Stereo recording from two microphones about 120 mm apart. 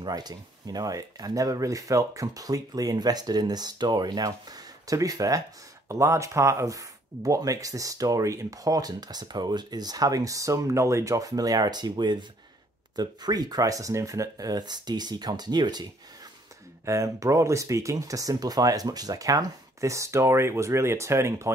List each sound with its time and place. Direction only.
0.0 s speech: 35° right (ahead or behind)
16.8 s speech: 25° right (ahead or behind)